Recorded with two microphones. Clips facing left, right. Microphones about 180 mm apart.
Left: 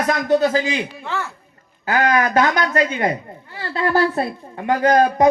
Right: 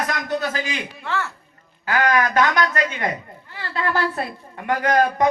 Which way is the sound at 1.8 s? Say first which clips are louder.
Left 2 dB; 30° left (ahead or behind).